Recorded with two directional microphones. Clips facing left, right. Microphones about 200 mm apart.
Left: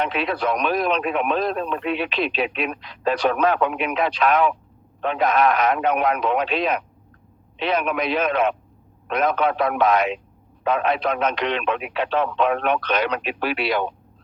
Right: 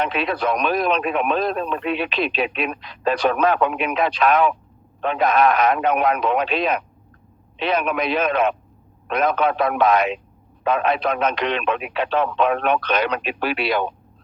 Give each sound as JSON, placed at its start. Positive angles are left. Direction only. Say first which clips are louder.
{"t": 0.0, "sound": "speech", "louder": "right 1 dB", "side_deg": -50}